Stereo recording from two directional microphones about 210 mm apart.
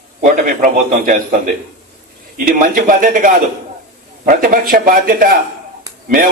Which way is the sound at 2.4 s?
40° right (ahead or behind).